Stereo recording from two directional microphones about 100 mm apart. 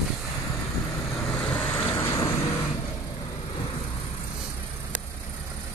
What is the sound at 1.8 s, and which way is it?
Vehicle, 20° left (ahead or behind).